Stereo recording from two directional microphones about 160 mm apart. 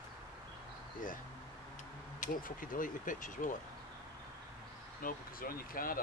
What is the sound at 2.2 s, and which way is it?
Speech, 60° left (ahead or behind).